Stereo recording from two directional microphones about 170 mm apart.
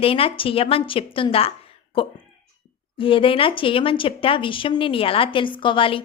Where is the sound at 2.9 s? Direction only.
30° left (ahead or behind).